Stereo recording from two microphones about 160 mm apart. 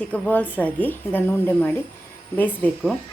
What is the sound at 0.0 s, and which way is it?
Speech, 10° left (ahead or behind).